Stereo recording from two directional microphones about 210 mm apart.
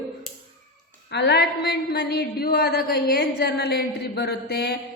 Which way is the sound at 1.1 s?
50° left (ahead or behind).